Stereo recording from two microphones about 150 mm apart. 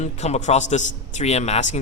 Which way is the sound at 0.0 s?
50° left (ahead or behind).